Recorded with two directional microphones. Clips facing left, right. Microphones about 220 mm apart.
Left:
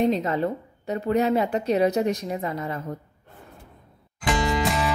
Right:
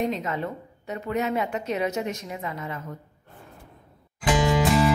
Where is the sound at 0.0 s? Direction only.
35° left (ahead or behind).